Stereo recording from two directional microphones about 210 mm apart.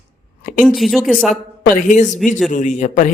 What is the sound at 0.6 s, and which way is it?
Speech, centre (ahead or behind).